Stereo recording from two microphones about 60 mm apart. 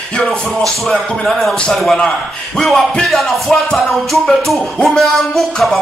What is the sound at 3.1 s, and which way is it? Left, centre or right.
Music, centre.